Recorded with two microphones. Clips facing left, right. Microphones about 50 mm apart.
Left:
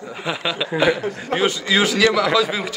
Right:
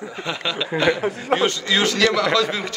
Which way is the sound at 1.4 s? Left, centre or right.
Centre.